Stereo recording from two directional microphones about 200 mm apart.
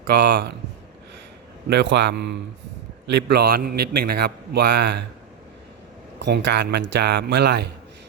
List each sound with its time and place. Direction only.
0.1 s a man's voice: 55° right (ahead or behind)
1.7 s a man's voice: 60° right (ahead or behind)
6.1 s a man's voice: 60° right (ahead or behind)